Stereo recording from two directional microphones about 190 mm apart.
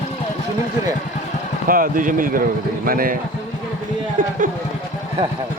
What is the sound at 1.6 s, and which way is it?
Speech, 45° right (ahead or behind).